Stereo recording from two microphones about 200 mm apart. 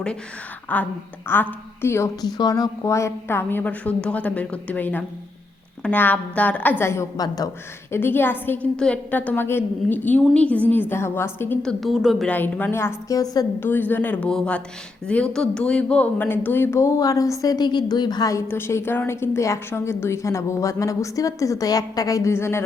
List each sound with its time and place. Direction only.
0.7 s speech: 10° left (ahead or behind)